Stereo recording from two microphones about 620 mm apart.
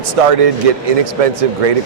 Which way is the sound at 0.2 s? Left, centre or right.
Right.